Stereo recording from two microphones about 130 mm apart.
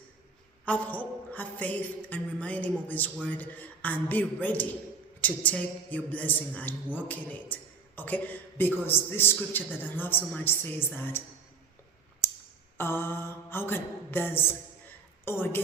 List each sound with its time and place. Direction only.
0.6 s a man's voice: 10° left (ahead or behind)
12.7 s a man's voice: 20° left (ahead or behind)